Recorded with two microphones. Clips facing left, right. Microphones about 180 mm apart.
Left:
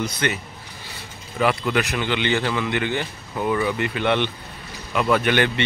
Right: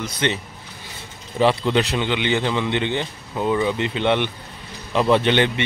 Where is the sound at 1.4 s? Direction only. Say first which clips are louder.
Right 3 dB; 30° right (ahead or behind).